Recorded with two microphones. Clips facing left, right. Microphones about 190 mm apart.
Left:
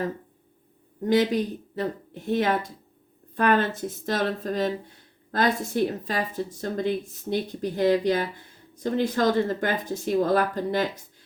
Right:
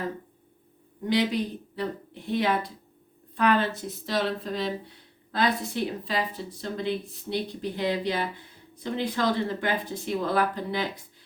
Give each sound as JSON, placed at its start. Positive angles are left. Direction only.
{"t": 1.0, "sound": "speech", "side_deg": 45}